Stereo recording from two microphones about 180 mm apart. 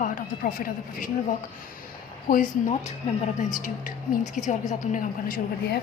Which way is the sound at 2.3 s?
45° left (ahead or behind).